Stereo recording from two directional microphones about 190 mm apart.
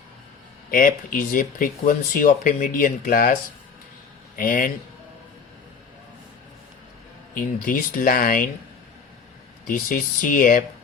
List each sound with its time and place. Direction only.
0.7 s speech: 45° left (ahead or behind)
4.4 s speech: 45° left (ahead or behind)
7.3 s speech: 45° left (ahead or behind)
9.6 s speech: 45° left (ahead or behind)